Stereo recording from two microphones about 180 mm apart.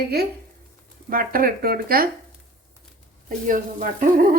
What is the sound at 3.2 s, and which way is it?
Speech, 50° right (ahead or behind).